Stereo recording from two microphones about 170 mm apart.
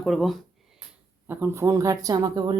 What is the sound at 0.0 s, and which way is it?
Speech, centre (ahead or behind).